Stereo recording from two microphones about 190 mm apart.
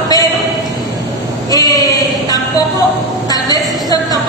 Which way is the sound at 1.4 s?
20° left (ahead or behind).